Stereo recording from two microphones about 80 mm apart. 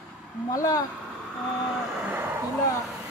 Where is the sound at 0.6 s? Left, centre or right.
Left.